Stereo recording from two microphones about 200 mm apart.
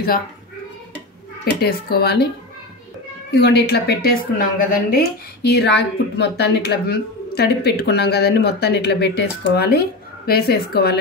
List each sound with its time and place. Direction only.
1.4 s speech: 50° left (ahead or behind)
3.3 s speech: 55° left (ahead or behind)